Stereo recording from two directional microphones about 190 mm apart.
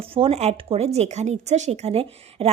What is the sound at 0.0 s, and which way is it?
A woman's voice, 30° right (ahead or behind).